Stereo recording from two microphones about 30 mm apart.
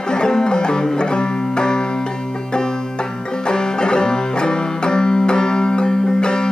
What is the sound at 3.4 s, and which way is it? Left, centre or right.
Banjo, left.